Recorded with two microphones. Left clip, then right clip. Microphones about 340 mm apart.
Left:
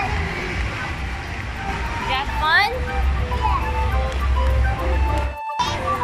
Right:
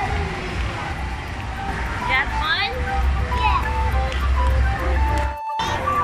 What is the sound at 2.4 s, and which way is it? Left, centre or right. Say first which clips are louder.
Music: left 5 dB; centre.